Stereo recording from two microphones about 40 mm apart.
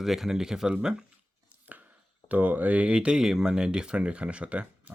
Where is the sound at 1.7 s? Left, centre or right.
Right.